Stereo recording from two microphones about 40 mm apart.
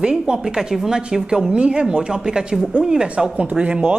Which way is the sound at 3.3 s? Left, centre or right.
Right.